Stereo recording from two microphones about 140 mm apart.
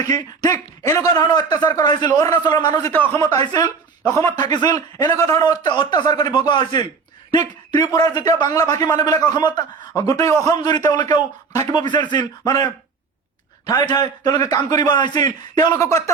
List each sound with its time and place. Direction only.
0.0 s a man's voice: 25° left (ahead or behind)
2.8 s a man's voice: 15° left (ahead or behind); by 12.6 s 30° left (ahead or behind)
13.7 s a man's voice: 25° left (ahead or behind)